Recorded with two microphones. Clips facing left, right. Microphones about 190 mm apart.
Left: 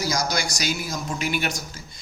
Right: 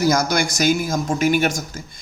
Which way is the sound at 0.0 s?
55° right (ahead or behind).